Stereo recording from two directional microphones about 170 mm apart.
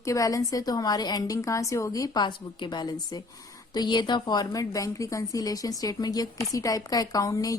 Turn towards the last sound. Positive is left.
turn(degrees=20)  # may be behind; listen again after turning